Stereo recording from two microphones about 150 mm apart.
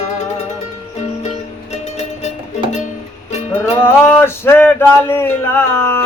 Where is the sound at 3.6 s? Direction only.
15° left (ahead or behind).